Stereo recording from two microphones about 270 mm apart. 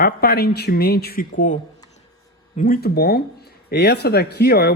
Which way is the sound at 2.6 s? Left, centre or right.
Left.